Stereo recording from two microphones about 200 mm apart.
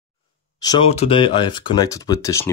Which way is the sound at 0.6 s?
25° left (ahead or behind).